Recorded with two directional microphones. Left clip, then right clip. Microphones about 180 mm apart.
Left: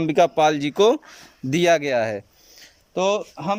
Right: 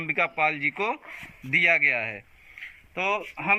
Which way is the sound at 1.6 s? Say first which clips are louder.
Left 4 dB; 80° left.